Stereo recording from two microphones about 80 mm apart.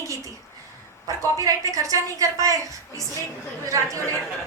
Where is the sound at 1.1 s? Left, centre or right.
Right.